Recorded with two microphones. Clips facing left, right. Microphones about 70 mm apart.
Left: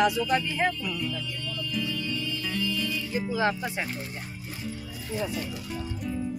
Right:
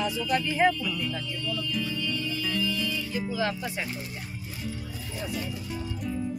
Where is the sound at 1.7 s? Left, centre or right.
Centre.